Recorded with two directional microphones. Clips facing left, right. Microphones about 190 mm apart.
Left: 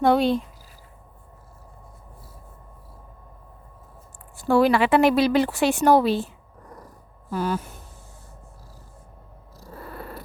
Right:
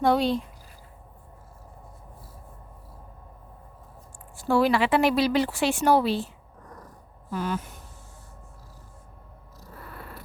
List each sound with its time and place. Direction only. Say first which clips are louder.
0.0 s speech: left 3 dB; 55° left (ahead or behind)
4.4 s speech: left 3 dB; 55° left (ahead or behind)
6.6 s a sound: left 2 dB; 10° left (ahead or behind)
7.3 s speech: left 4 dB; 35° left (ahead or behind)
9.7 s purr: left 6 dB; 35° left (ahead or behind)